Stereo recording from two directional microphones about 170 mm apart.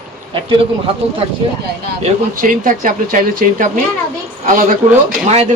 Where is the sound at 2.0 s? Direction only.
50° right (ahead or behind).